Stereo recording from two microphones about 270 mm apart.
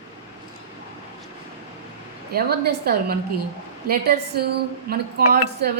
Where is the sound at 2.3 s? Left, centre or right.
Right.